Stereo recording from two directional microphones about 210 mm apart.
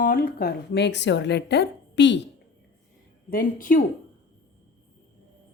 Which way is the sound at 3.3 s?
40° left (ahead or behind).